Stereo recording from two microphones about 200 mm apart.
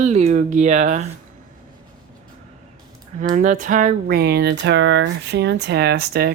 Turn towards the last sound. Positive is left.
turn(degrees=-50)  # may be behind; listen again after turning